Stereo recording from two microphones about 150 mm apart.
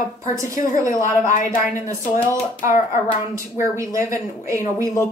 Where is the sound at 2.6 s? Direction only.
60° left (ahead or behind).